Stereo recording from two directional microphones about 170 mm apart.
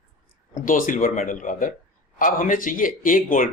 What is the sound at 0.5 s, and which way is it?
Speech, 50° left (ahead or behind).